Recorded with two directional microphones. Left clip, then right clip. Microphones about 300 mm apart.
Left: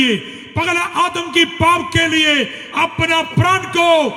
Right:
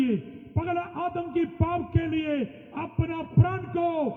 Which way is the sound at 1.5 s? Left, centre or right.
Left.